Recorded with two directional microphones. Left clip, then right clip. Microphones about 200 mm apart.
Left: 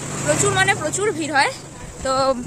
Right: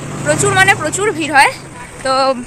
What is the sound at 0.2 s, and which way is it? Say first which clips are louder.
Speech: right 7 dB; 5° left (ahead or behind).